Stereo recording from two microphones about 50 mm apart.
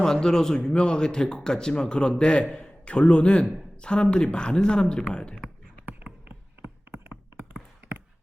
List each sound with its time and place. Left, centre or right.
0.0 s a man's voice: centre